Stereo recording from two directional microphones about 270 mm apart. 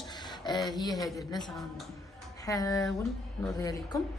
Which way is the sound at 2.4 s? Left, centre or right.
Centre.